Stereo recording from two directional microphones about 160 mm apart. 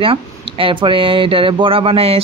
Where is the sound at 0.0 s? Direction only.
35° right (ahead or behind).